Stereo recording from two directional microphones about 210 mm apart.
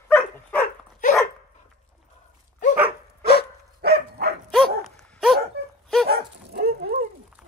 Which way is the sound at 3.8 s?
50° right (ahead or behind).